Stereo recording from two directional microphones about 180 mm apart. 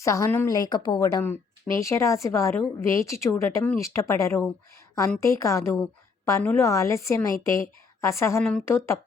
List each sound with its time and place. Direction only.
0.0 s speech: 15° left (ahead or behind)